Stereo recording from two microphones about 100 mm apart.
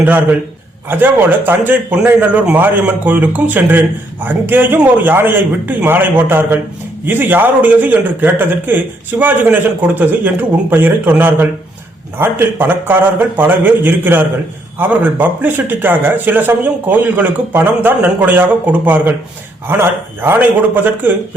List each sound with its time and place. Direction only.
0.0 s a man's voice: 20° right (ahead or behind)